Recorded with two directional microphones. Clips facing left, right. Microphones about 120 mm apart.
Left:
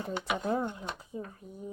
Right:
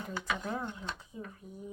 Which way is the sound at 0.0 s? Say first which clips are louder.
Left 4 dB; 25° left (ahead or behind).